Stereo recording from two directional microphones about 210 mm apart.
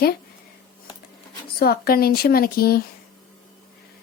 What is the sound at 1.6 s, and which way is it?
A woman's voice, 45° left (ahead or behind).